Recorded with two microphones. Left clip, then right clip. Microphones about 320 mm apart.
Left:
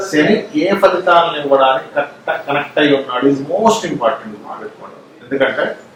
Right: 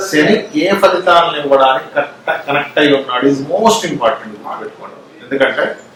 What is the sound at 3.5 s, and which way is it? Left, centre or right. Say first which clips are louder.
Speech: right 2 dB; left.